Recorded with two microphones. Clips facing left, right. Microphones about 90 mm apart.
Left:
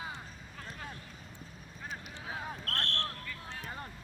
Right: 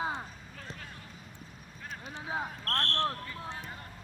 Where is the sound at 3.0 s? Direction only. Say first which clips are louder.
Right 7 dB; 30° right (ahead or behind).